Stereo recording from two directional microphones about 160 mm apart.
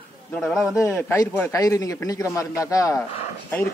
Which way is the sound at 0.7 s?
10° left (ahead or behind).